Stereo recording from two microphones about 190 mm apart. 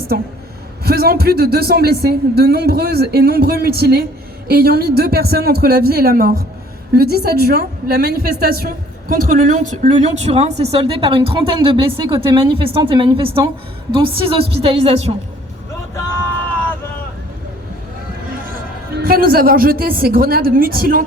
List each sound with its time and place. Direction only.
0.1 s a woman's voice: 55° right (ahead or behind); by 13.5 s 25° right (ahead or behind)
14.7 s a woman's voice: 30° right (ahead or behind)
18.9 s a woman's voice: 50° right (ahead or behind)